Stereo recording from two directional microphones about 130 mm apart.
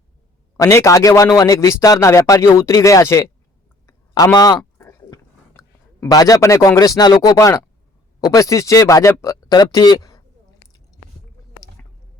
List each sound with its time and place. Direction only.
0.5 s speech: 20° left (ahead or behind)
3.8 s a sound: 30° left (ahead or behind)
8.2 s speech: 30° left (ahead or behind)